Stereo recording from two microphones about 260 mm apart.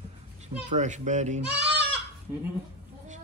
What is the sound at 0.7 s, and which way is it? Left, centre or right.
Speech, right.